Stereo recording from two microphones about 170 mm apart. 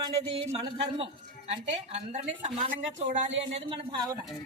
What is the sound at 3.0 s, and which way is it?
Speech, 45° right (ahead or behind).